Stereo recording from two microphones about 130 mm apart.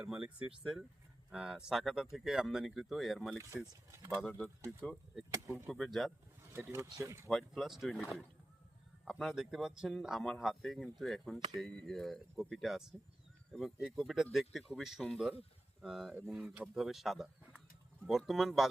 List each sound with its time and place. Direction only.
0.0 s speech: 10° right (ahead or behind)
3.2 s speech: 20° right (ahead or behind)
4.3 s speech: 15° left (ahead or behind)
5.3 s speech: 20° right (ahead or behind)
5.6 s speech: centre (ahead or behind)
6.5 s speech: 15° right (ahead or behind)
7.3 s speech: centre (ahead or behind)
9.0 s speech: centre (ahead or behind)